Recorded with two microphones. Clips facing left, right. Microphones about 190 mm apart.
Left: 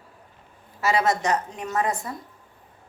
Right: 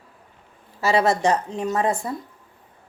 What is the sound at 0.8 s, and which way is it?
A woman's voice, 30° right (ahead or behind).